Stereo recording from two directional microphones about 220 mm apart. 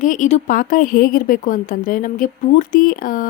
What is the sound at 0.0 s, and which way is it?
A woman's voice, 35° left (ahead or behind).